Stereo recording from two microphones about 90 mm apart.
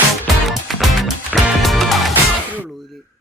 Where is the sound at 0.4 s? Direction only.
Centre (ahead or behind).